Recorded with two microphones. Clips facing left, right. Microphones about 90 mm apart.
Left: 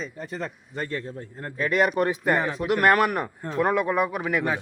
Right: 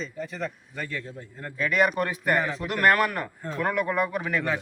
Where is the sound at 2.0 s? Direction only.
20° left (ahead or behind).